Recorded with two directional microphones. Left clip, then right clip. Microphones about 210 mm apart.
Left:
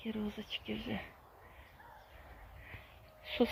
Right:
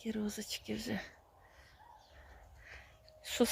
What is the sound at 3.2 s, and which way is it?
Speech, 20° right (ahead or behind).